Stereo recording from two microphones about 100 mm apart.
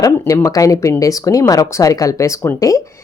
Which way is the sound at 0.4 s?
35° left (ahead or behind).